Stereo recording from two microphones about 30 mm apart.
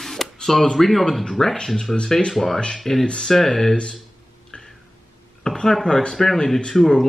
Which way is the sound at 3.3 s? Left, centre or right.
Centre.